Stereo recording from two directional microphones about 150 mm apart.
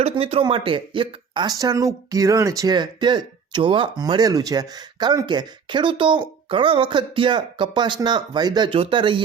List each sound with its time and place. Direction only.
0.0 s speech: 40° right (ahead or behind)